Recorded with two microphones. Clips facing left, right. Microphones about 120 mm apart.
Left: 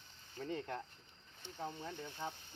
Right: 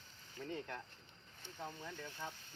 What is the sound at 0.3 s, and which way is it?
Speech, 30° left (ahead or behind).